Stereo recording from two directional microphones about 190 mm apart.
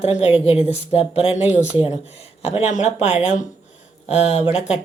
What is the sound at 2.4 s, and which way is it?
Speech, 35° left (ahead or behind).